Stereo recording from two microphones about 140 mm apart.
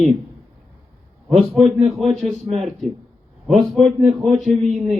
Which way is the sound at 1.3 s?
Centre (ahead or behind).